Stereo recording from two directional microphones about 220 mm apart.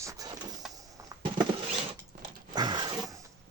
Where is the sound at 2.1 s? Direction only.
45° right (ahead or behind).